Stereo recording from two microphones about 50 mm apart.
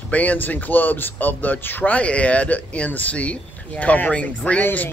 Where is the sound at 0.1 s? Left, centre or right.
Left.